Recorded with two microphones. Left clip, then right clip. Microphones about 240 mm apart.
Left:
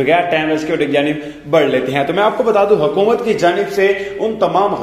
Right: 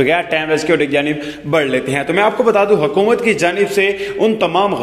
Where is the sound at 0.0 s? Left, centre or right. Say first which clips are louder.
Left 1 dB; right.